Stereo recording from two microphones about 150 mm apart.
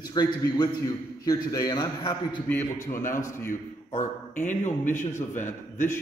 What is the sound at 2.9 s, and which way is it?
Speech, 65° left (ahead or behind).